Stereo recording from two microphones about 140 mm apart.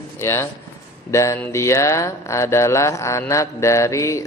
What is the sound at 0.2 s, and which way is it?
Speech, 20° left (ahead or behind).